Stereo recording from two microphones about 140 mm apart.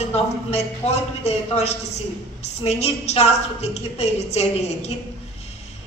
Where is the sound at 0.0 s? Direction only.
50° left (ahead or behind).